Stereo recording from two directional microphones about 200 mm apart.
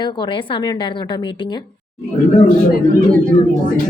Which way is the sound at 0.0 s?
20° left (ahead or behind).